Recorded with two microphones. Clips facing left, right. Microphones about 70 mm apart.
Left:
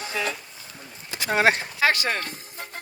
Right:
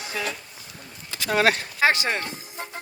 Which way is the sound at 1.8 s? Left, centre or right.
Right.